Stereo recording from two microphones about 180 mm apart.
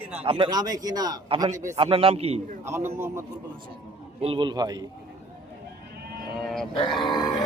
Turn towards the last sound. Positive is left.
turn(degrees=25)  # may be behind; listen again after turning